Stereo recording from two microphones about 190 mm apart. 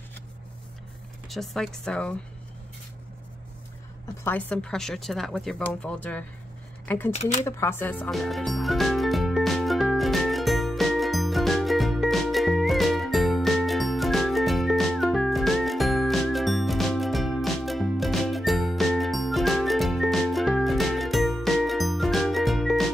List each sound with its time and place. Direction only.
1.3 s speech: centre (ahead or behind)
4.2 s speech: 10° left (ahead or behind)
7.1 s speech: 35° left (ahead or behind)
7.4 s music: 15° left (ahead or behind)